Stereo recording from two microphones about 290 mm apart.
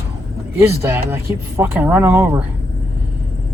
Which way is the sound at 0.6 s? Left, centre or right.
Centre.